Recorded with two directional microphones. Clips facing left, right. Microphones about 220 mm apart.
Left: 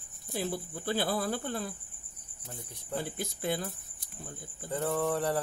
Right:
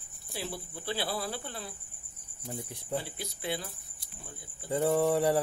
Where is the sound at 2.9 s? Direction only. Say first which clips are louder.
Left 1 dB; 50° left (ahead or behind).